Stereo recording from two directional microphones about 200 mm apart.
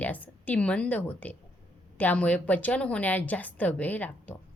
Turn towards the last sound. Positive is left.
turn(degrees=10)  # may be behind; listen again after turning